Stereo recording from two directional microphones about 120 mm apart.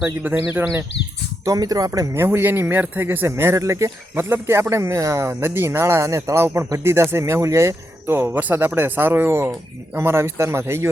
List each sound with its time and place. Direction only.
0.0 s speech: 15° right (ahead or behind)
1.5 s a man's voice: 30° right (ahead or behind)